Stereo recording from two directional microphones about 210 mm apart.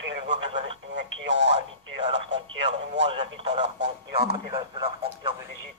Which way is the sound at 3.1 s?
30° right (ahead or behind).